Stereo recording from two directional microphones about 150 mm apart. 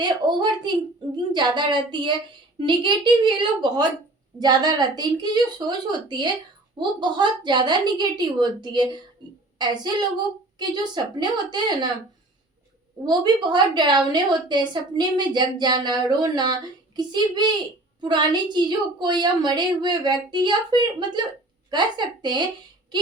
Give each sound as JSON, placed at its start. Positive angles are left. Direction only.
{"t": 0.0, "sound": "a woman's voice", "side_deg": -30}
{"t": 13.1, "sound": "a woman's voice", "side_deg": -30}